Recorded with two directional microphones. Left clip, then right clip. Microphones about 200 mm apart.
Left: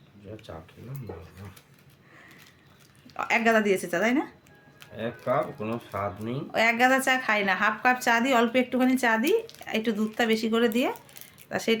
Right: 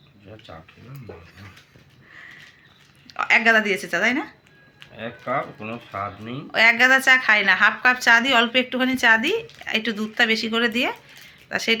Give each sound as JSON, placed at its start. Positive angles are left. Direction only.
{"t": 0.5, "sound": "speech", "side_deg": 55}
{"t": 3.1, "sound": "speech", "side_deg": 10}
{"t": 4.8, "sound": "speech", "side_deg": 50}
{"t": 6.5, "sound": "speech", "side_deg": 10}